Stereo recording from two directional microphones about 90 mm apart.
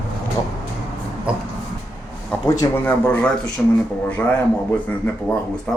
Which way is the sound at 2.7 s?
20° left (ahead or behind).